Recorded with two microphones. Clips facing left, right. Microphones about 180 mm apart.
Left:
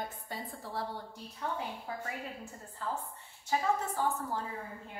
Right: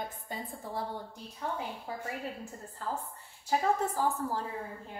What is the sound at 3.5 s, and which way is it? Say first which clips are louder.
Speech: right 3 dB; 35° right (ahead or behind).